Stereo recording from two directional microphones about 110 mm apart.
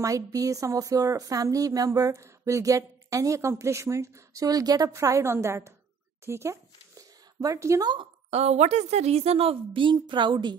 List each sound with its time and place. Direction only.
0.0 s a woman's voice: 30° right (ahead or behind)
6.2 s a sound: 25° right (ahead or behind)
8.3 s a woman's voice: 70° right (ahead or behind); by 10.5 s 45° right (ahead or behind)